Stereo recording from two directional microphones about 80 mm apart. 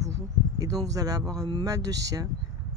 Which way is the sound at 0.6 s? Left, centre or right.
Right.